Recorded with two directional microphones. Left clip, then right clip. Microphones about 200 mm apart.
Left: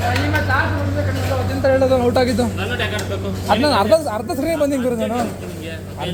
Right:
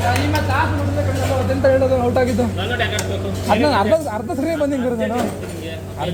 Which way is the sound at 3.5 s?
Centre (ahead or behind).